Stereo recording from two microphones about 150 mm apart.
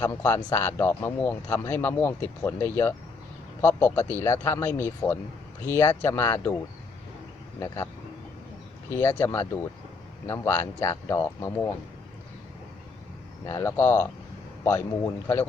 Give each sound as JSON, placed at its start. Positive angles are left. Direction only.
{"t": 0.0, "sound": "speech", "side_deg": 15}
{"t": 9.0, "sound": "speech", "side_deg": 15}
{"t": 13.4, "sound": "speech", "side_deg": 20}